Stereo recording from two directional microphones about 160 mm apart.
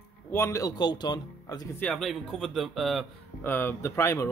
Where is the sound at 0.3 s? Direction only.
15° left (ahead or behind).